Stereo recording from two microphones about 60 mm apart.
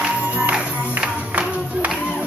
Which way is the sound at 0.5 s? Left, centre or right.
Right.